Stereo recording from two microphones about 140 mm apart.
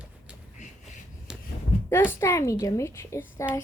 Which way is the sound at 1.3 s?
5° right (ahead or behind).